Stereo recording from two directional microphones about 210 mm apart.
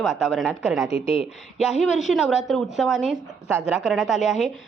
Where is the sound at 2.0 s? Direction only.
Centre (ahead or behind).